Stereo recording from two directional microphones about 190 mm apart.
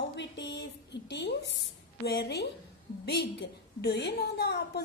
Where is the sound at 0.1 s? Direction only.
70° left (ahead or behind).